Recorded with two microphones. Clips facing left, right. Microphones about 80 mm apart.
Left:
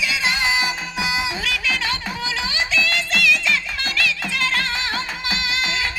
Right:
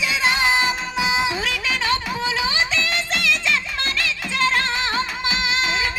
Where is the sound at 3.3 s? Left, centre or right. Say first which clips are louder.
Left 1 dB; right.